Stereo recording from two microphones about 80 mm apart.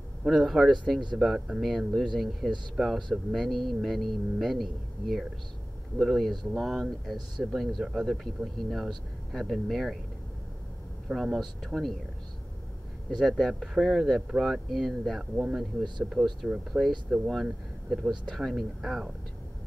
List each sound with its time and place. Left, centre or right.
0.2 s speech: centre
11.1 s speech: centre
13.2 s speech: centre